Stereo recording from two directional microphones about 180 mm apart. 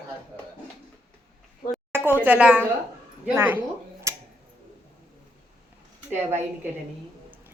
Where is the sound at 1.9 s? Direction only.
10° right (ahead or behind).